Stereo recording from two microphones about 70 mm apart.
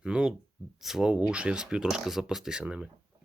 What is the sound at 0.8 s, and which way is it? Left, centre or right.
Speech, centre.